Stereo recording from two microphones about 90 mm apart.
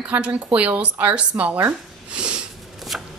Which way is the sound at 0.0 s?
15° right (ahead or behind).